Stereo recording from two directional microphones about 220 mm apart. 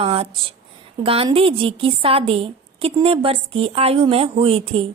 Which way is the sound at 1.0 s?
25° right (ahead or behind).